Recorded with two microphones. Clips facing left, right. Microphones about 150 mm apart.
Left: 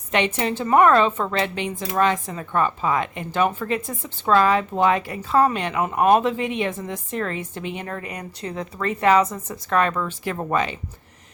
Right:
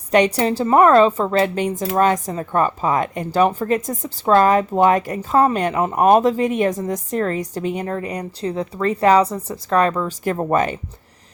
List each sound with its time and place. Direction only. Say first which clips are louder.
0.1 s a woman's voice: right 6 dB; 40° right (ahead or behind)